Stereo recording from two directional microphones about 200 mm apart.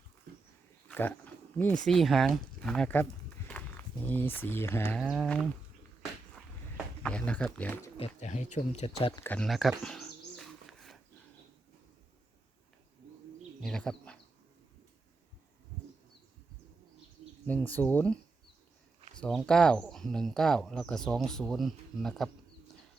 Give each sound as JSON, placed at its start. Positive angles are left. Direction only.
{"t": 0.9, "sound": "speech", "side_deg": 10}
{"t": 7.0, "sound": "speech", "side_deg": 5}
{"t": 7.9, "sound": "speech", "side_deg": 30}
{"t": 9.2, "sound": "bird", "side_deg": 5}
{"t": 13.6, "sound": "speech", "side_deg": 5}
{"t": 17.4, "sound": "speech", "side_deg": 10}
{"t": 19.2, "sound": "speech", "side_deg": 0}